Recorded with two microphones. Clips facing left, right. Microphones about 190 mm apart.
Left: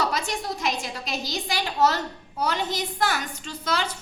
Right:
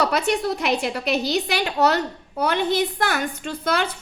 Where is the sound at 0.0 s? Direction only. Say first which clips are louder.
Right 6 dB; 60° right (ahead or behind).